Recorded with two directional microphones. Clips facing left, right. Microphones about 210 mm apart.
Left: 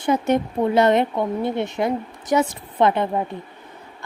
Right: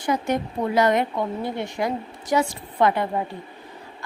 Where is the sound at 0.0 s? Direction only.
25° left (ahead or behind).